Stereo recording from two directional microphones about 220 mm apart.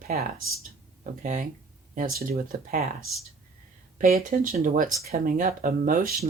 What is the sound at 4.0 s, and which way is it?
Speech, 35° right (ahead or behind).